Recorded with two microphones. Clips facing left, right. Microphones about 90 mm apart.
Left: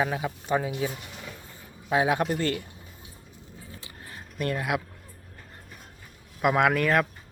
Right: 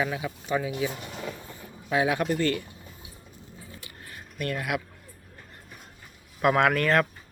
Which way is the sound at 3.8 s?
30° left (ahead or behind).